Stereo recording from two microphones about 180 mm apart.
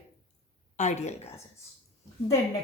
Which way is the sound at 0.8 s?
40° left (ahead or behind).